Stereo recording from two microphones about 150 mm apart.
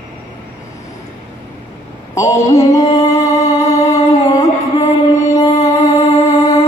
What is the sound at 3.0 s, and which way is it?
Music, 20° left (ahead or behind).